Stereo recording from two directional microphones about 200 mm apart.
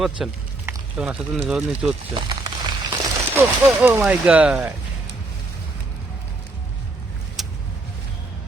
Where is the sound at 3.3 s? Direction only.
10° right (ahead or behind).